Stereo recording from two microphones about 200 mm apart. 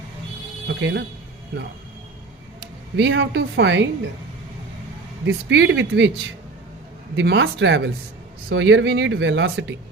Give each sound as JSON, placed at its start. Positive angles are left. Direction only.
{"t": 0.7, "sound": "speech", "side_deg": -60}
{"t": 2.9, "sound": "a woman's voice", "side_deg": -65}
{"t": 5.2, "sound": "a woman's voice", "side_deg": -65}
{"t": 7.2, "sound": "speech", "side_deg": -65}